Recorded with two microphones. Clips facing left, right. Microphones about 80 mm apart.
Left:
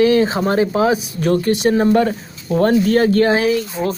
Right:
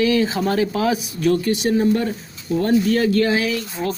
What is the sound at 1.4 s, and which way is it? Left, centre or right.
Speech, left.